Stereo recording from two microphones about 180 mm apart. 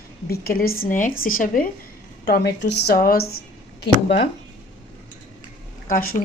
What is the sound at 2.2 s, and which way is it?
A woman's voice, 65° left (ahead or behind).